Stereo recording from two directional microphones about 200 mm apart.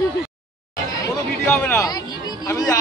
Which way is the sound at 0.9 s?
15° left (ahead or behind).